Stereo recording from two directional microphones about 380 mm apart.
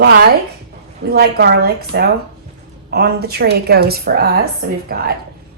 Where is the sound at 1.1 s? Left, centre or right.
Right.